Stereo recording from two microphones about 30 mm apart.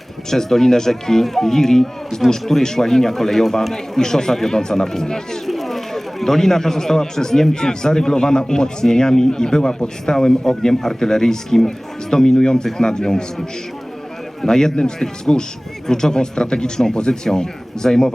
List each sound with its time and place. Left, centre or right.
0.3 s speech: centre
5.5 s speech: centre; by 13.2 s left
14.4 s speech: centre